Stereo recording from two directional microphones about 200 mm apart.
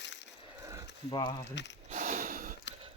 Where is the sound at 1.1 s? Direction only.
25° left (ahead or behind).